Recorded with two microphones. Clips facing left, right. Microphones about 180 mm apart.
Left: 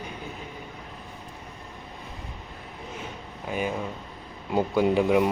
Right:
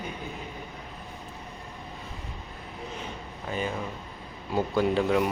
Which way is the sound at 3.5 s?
10° left (ahead or behind).